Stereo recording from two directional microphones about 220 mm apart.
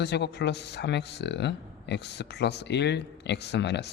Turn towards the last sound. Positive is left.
turn(degrees=50)  # may be behind; listen again after turning